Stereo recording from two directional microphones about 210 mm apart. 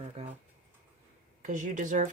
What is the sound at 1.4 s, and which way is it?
Speech, 35° right (ahead or behind).